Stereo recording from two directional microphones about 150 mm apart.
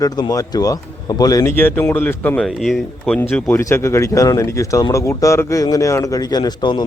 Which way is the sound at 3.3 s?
15° left (ahead or behind).